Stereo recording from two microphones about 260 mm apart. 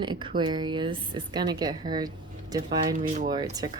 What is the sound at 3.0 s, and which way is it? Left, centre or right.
Speech, right.